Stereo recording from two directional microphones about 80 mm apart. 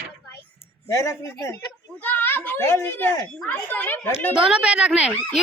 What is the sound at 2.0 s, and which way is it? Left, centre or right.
A child's voice, left.